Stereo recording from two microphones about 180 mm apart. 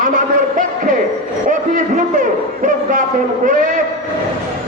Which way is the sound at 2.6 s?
50° right (ahead or behind).